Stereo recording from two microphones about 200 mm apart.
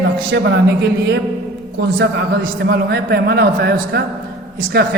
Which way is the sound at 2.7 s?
55° right (ahead or behind).